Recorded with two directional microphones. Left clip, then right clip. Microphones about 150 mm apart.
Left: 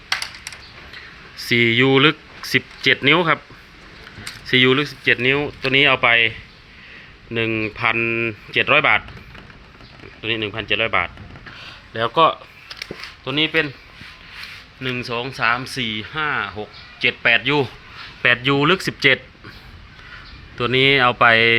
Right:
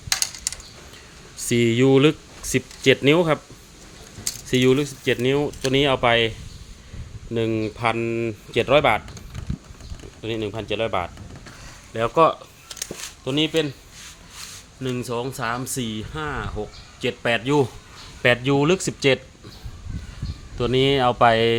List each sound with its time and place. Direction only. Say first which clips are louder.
0.1 s coin: even; 50° right (ahead or behind)
1.5 s speech: left 3 dB; 20° right (ahead or behind)
4.4 s speech: left 4 dB; 15° right (ahead or behind)
7.3 s speech: left 3 dB; 20° right (ahead or behind)
10.2 s speech: left 5 dB; 10° right (ahead or behind)
12.6 s a sound: left 1 dB; 40° right (ahead or behind)
14.8 s speech: left 3 dB; 35° right (ahead or behind)
18.2 s speech: left 2 dB; 15° right (ahead or behind)
20.6 s speech: left 4 dB; 15° right (ahead or behind)